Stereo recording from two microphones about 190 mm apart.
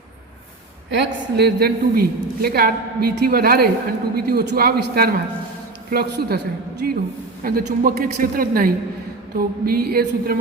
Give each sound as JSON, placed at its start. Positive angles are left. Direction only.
{"t": 0.9, "sound": "a man's voice", "side_deg": -65}